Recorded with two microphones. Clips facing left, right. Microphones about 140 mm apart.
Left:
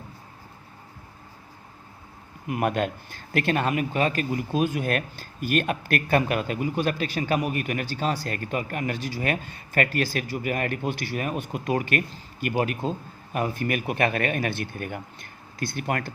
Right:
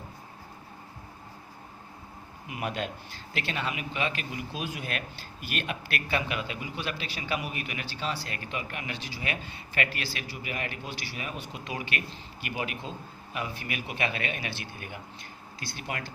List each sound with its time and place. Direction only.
2.5 s a man's voice: 50° left (ahead or behind)